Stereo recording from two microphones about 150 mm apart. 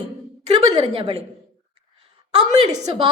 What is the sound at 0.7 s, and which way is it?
Speech, 30° right (ahead or behind).